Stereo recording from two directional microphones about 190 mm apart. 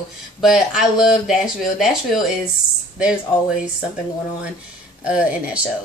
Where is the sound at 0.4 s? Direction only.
Centre (ahead or behind).